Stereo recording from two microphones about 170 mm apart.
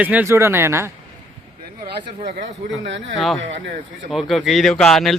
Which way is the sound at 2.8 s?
90° right.